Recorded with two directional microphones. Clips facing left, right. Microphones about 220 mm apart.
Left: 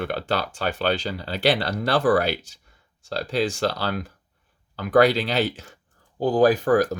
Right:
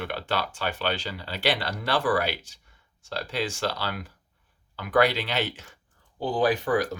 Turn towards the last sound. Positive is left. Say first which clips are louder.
# left 5 dB
turn(degrees=40)  # may be behind; listen again after turning